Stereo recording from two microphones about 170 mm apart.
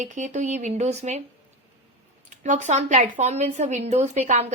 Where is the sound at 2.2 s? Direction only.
45° right (ahead or behind).